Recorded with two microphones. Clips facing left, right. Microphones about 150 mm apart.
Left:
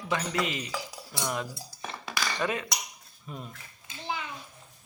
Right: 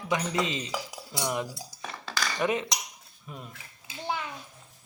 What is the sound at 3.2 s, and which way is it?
Speech, centre (ahead or behind).